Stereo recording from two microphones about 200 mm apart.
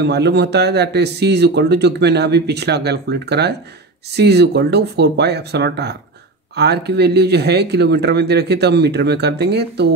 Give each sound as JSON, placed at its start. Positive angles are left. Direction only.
{"t": 0.0, "sound": "speech", "side_deg": -55}